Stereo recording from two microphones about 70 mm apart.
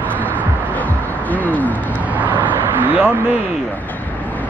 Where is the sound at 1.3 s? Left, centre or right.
Left.